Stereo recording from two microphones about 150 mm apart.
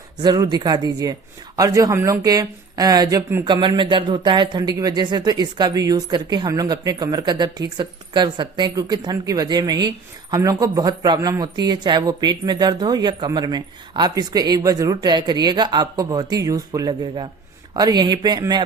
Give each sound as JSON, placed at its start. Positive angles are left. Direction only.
{"t": 0.2, "sound": "speech", "side_deg": -25}